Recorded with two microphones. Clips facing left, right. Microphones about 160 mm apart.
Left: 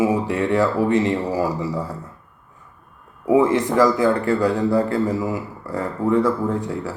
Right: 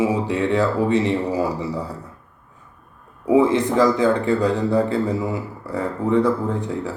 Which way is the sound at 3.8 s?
20° right (ahead or behind).